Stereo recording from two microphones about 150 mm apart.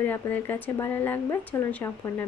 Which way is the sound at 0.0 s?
10° left (ahead or behind).